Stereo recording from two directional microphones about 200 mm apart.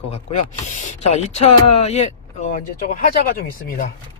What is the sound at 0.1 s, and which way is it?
Speech, 35° left (ahead or behind).